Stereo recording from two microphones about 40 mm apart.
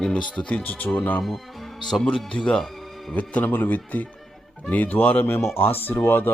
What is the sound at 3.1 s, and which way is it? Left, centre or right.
Speech, left.